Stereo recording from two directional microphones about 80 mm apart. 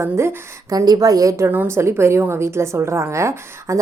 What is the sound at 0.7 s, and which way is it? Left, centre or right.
Speech, right.